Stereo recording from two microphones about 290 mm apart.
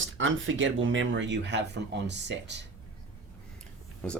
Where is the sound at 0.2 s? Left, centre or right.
Right.